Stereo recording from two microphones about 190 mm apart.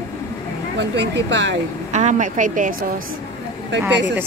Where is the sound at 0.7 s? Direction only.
65° right (ahead or behind).